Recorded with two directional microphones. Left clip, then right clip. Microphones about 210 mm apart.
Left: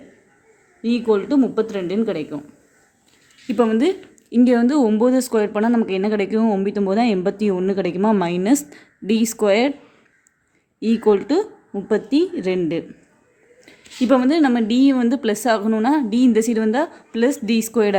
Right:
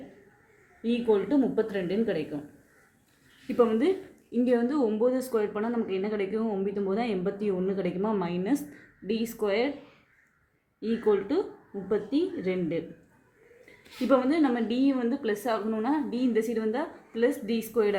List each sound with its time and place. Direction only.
1.0 s speech: 45° left (ahead or behind)
3.4 s speech: 50° left (ahead or behind)
10.8 s speech: 50° left (ahead or behind)
14.1 s speech: 45° left (ahead or behind)